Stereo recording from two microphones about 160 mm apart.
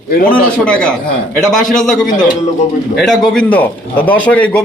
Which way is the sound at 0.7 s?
5° left (ahead or behind).